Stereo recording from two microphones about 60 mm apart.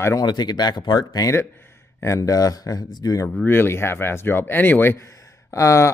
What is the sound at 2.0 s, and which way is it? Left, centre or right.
Speech, left.